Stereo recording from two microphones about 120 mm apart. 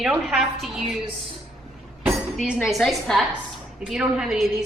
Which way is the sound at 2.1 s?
Centre (ahead or behind).